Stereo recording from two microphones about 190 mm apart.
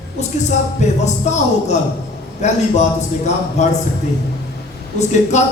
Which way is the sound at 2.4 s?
35° left (ahead or behind).